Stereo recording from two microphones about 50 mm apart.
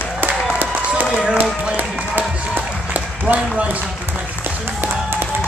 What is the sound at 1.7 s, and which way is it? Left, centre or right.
Run, right.